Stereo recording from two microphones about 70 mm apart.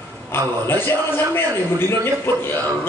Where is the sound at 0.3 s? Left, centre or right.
Left.